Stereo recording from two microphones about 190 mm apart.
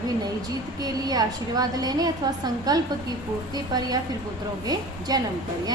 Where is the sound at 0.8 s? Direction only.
20° right (ahead or behind).